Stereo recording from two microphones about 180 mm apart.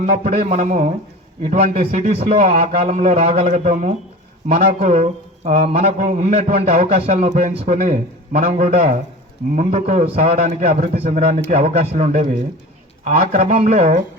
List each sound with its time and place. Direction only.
0.0 s a man's voice: 40° right (ahead or behind)
10.9 s a man's voice: 35° right (ahead or behind); by 13.6 s 50° right (ahead or behind)
13.6 s a man's voice: 40° right (ahead or behind)